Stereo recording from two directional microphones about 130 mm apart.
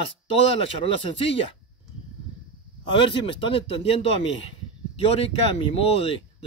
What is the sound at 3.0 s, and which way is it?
A man's voice, 40° left (ahead or behind).